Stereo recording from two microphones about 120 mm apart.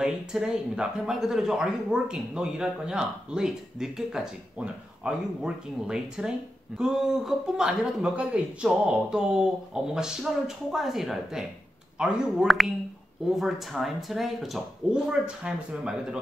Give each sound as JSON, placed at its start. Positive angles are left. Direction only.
{"t": 0.0, "sound": "speech", "side_deg": -5}